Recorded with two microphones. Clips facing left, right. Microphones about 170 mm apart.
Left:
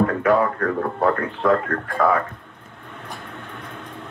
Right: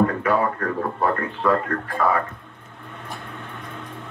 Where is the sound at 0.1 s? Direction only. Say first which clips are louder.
Left 3 dB; 50° left (ahead or behind).